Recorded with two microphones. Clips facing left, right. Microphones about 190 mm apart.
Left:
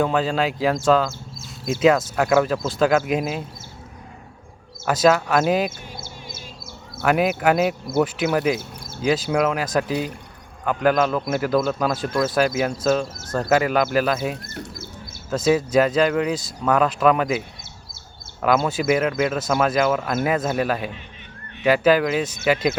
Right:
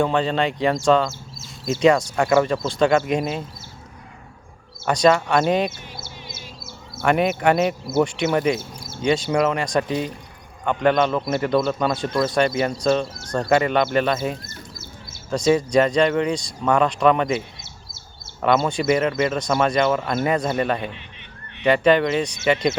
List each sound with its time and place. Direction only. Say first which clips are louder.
0.0 s speech: even; 5° left (ahead or behind)
4.9 s speech: even; 5° left (ahead or behind)
6.0 s bird: left 1 dB; 50° left (ahead or behind)
7.0 s speech: even; 5° left (ahead or behind)
14.3 s speech: left 5 dB; 65° left (ahead or behind)
15.3 s speech: right 1 dB; 5° left (ahead or behind)
18.4 s speech: even; centre (ahead or behind)